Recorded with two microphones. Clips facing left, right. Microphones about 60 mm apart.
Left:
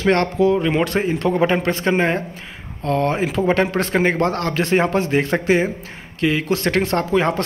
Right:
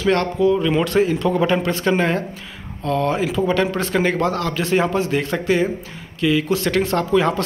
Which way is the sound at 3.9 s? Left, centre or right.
Left.